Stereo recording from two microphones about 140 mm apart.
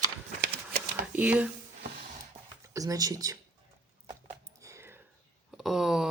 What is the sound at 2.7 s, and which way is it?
Speech, 25° right (ahead or behind).